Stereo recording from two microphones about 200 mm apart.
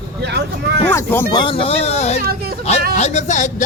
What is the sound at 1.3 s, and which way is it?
Speech, 25° left (ahead or behind).